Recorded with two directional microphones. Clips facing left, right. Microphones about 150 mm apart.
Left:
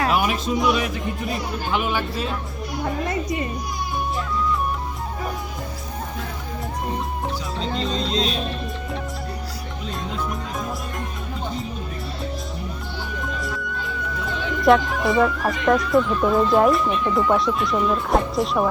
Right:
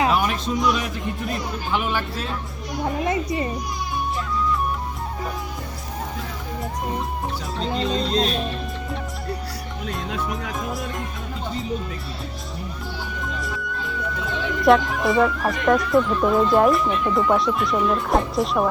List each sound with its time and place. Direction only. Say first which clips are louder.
0.1 s speech: left 1 dB; 5° left (ahead or behind)
3.1 s a child's voice: right 2 dB; 30° right (ahead or behind)
7.8 s speech: right 3 dB; 5° right (ahead or behind)
13.2 s music: left 1 dB; centre (ahead or behind)
14.0 s speech: right 2 dB; centre (ahead or behind)